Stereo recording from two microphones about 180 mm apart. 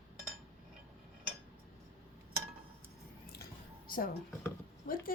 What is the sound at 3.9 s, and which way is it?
Speech, 55° left (ahead or behind).